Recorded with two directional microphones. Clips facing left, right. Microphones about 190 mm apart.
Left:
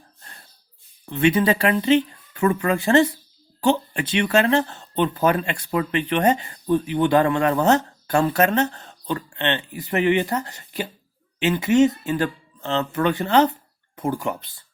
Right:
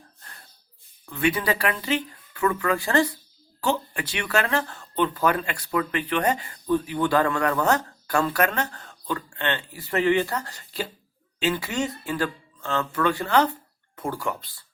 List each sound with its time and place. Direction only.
1.1 s speech: 20° left (ahead or behind)